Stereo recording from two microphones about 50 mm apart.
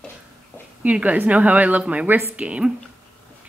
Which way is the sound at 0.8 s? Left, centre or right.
Right.